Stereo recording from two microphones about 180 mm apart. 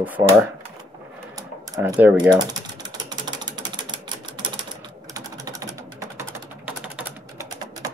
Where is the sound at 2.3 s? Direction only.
25° right (ahead or behind).